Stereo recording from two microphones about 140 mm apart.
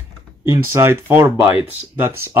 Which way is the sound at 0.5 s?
20° right (ahead or behind).